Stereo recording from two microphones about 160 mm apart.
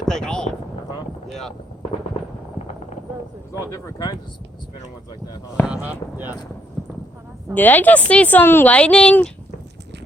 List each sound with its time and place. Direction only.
0.0 s a sound: 5° left (ahead or behind)
1.3 s speech: centre (ahead or behind)
3.7 s speech: 20° left (ahead or behind)
5.6 s speech: 5° right (ahead or behind)
7.5 s speech: 10° left (ahead or behind)